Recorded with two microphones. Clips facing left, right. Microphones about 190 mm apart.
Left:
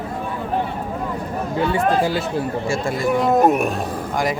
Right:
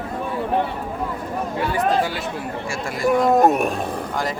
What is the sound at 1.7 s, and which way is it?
Speech, 25° left (ahead or behind).